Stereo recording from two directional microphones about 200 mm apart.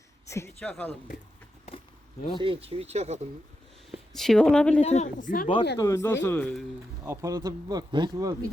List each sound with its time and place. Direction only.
0.3 s speech: 15° left (ahead or behind)
2.4 s speech: 25° right (ahead or behind)
4.1 s speech: centre (ahead or behind)
4.8 s speech: 35° left (ahead or behind)
5.7 s speech: 15° left (ahead or behind)
7.0 s speech: 15° right (ahead or behind)